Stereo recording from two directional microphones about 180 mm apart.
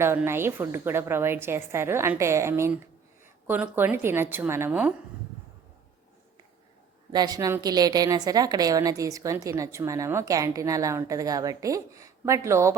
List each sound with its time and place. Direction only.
0.0 s a woman's voice: 15° right (ahead or behind)
7.1 s a woman's voice: 20° right (ahead or behind)